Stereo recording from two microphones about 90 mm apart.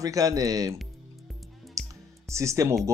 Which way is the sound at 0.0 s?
40° right (ahead or behind).